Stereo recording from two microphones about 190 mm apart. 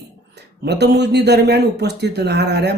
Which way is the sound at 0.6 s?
60° right (ahead or behind).